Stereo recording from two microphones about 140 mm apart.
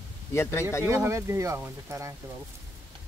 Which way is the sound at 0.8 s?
20° right (ahead or behind).